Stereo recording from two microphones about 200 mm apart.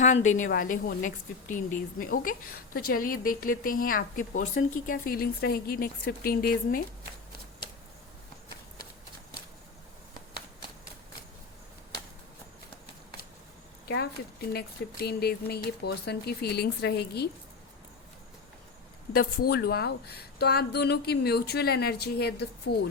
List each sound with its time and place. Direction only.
0.0 s a woman's voice: 35° left (ahead or behind)
13.8 s a woman's voice: 55° left (ahead or behind)
19.1 s a woman's voice: 50° left (ahead or behind)